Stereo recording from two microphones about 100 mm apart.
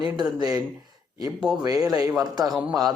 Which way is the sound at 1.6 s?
40° right (ahead or behind).